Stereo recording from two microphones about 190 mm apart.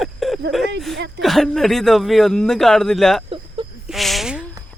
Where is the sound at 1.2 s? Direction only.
Centre (ahead or behind).